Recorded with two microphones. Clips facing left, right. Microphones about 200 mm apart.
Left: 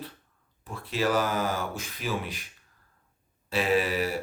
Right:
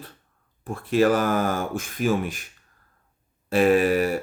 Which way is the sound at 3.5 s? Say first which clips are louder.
Right 7 dB; 50° right (ahead or behind).